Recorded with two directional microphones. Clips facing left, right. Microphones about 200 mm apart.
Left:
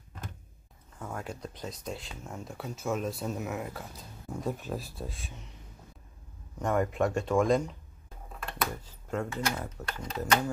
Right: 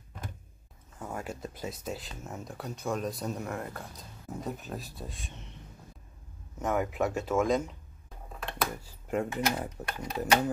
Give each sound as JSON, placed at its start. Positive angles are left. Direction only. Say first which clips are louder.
{"t": 0.9, "sound": "speech", "louder": "right 1 dB", "side_deg": -5}
{"t": 6.6, "sound": "speech", "louder": "left 1 dB", "side_deg": -5}
{"t": 9.1, "sound": "speech", "louder": "right 2 dB", "side_deg": -15}